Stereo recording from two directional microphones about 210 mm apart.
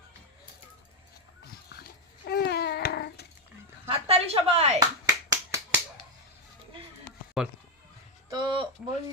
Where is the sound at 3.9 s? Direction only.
30° right (ahead or behind).